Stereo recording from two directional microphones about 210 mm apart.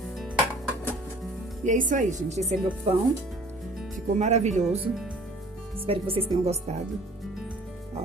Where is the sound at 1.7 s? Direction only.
35° right (ahead or behind).